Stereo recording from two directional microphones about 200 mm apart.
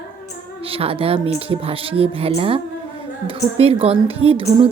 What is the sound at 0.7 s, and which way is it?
A woman's voice, 30° right (ahead or behind).